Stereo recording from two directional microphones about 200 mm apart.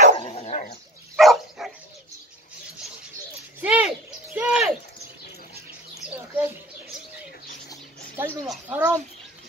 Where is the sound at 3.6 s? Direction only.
5° right (ahead or behind).